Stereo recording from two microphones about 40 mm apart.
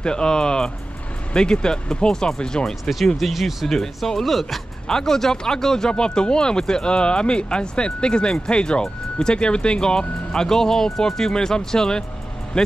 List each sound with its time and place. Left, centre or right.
0.0 s speech: left
2.8 s speech: centre
3.6 s speech: centre